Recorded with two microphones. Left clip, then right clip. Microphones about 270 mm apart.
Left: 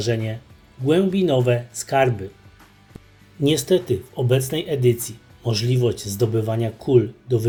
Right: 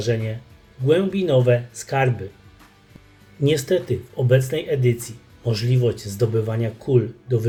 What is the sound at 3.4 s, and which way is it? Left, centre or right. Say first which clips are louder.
Speech: left 1 dB; left.